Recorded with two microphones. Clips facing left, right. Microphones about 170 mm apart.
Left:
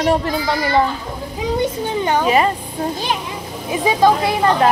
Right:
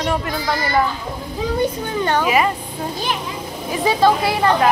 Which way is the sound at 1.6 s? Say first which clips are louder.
Even; 20° left (ahead or behind).